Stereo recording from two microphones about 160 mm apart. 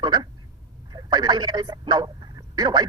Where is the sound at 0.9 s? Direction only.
25° right (ahead or behind).